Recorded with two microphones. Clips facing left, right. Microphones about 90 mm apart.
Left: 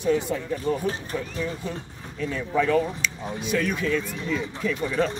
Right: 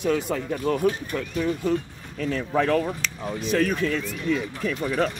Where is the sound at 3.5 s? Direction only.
45° right (ahead or behind).